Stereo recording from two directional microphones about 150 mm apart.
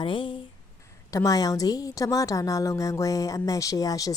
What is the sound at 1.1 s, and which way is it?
Speech, 25° left (ahead or behind).